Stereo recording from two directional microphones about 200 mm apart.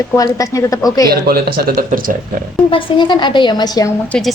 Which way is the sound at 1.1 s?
50° right (ahead or behind).